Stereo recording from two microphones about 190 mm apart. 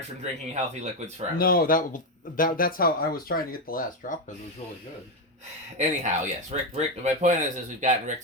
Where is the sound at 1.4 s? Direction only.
50° left (ahead or behind).